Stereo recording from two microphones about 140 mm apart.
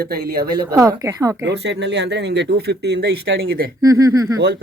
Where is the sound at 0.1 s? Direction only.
90° right.